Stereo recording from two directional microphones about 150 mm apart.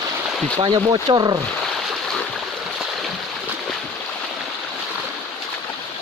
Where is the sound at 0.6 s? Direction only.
35° right (ahead or behind).